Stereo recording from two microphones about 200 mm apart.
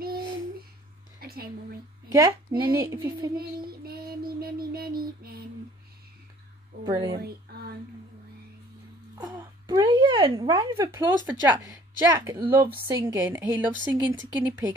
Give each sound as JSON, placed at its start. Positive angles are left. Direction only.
{"t": 1.2, "sound": "a sound", "side_deg": -50}
{"t": 2.0, "sound": "speech", "side_deg": -15}
{"t": 3.3, "sound": "child singing", "side_deg": -50}
{"t": 6.8, "sound": "speech", "side_deg": -20}
{"t": 7.2, "sound": "a sound", "side_deg": -50}
{"t": 9.2, "sound": "speech", "side_deg": -20}